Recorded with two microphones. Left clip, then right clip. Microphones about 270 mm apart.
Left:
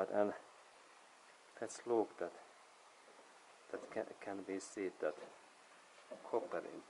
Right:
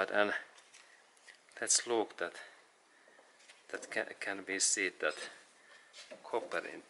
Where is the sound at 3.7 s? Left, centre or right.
Centre.